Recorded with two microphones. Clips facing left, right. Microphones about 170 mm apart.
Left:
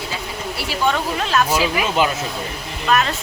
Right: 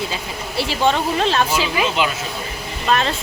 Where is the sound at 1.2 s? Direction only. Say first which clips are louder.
Right 1 dB; 30° right (ahead or behind).